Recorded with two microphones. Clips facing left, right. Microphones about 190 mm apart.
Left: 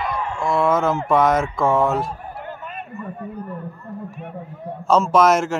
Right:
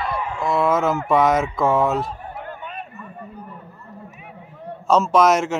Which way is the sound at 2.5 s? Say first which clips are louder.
Even; centre (ahead or behind).